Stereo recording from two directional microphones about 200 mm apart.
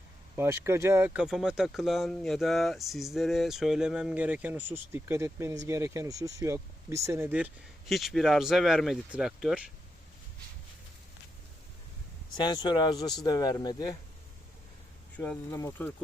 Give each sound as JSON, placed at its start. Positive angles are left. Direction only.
{"t": 0.3, "sound": "speech", "side_deg": -15}
{"t": 12.4, "sound": "speech", "side_deg": 20}
{"t": 15.2, "sound": "speech", "side_deg": 10}